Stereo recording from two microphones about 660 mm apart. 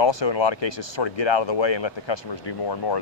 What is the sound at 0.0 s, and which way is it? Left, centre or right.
Speech, left.